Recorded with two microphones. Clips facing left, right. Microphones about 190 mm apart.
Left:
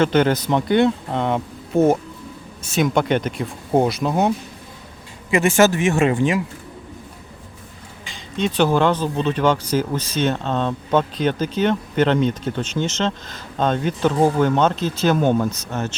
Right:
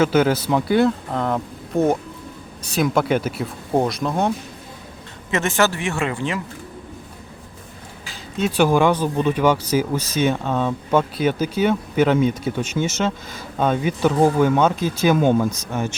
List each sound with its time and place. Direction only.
0.0 s speech: 5° right (ahead or behind)
5.3 s speech: 15° left (ahead or behind)
8.0 s speech: 5° right (ahead or behind)